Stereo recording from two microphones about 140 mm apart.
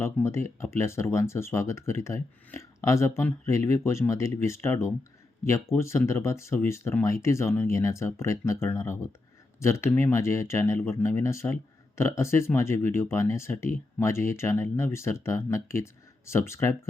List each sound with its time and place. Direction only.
0.0 s speech: 20° left (ahead or behind)